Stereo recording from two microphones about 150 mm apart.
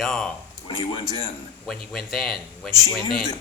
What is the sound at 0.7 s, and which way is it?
Speech, 35° left (ahead or behind).